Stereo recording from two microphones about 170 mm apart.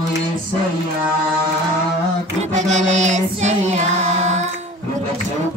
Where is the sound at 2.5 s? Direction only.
45° right (ahead or behind).